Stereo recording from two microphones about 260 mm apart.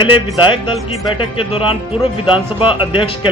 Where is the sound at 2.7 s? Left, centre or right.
Centre.